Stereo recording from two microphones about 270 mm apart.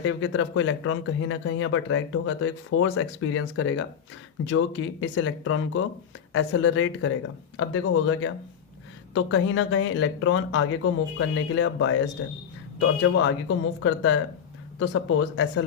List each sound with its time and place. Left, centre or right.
0.0 s speech: left